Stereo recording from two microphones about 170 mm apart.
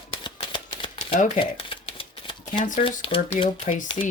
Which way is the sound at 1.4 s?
35° left (ahead or behind).